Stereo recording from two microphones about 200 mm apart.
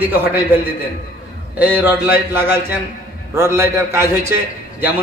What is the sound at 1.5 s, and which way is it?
A man's voice, 10° right (ahead or behind).